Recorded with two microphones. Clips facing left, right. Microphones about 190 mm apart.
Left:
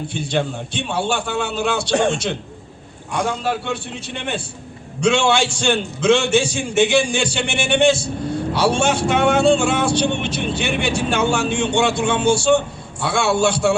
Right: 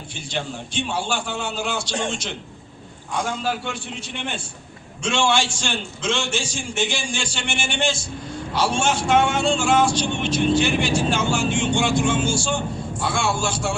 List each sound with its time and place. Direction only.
0.1 s a man's voice: 60° left (ahead or behind)
4.9 s speech: 65° left (ahead or behind)